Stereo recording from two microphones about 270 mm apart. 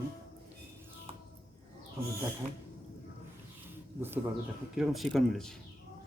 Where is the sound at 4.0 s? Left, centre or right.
Centre.